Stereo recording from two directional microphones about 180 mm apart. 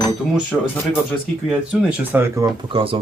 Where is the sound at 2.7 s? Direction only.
30° right (ahead or behind).